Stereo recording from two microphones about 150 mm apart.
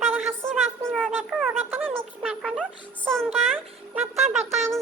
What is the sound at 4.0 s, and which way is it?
Music, 45° right (ahead or behind).